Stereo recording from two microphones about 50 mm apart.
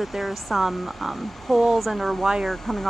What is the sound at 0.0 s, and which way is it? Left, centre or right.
Speech, centre.